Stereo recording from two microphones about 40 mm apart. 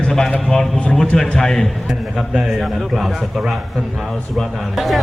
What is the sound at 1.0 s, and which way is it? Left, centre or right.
Speech, centre.